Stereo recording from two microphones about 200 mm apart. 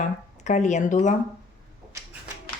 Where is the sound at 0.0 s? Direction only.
35° left (ahead or behind).